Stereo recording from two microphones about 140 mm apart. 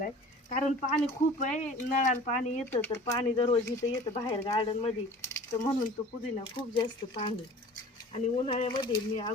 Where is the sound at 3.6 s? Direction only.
20° left (ahead or behind).